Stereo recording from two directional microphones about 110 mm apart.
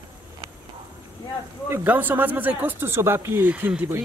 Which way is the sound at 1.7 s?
15° right (ahead or behind).